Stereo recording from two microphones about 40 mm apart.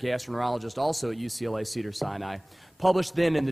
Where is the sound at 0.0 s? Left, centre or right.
Centre.